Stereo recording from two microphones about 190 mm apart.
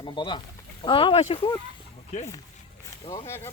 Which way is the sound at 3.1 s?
15° left (ahead or behind).